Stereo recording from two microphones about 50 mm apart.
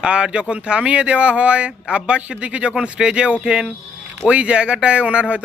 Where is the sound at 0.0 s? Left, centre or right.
Right.